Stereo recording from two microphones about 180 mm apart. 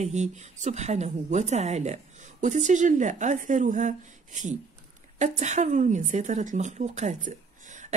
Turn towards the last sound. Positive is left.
turn(degrees=-45)  # may be behind; listen again after turning